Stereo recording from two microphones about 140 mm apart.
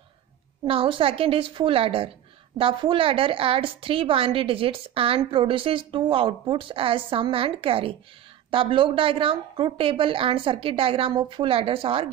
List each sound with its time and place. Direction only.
0.7 s a woman's voice: 40° right (ahead or behind)